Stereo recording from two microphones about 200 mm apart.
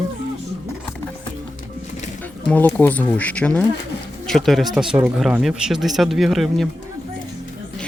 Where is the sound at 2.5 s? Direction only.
10° left (ahead or behind).